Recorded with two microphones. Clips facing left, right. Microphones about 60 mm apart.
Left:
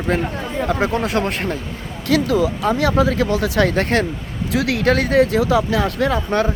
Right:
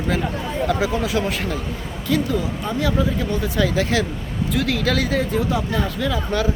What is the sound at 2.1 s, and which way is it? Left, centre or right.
Speech, left.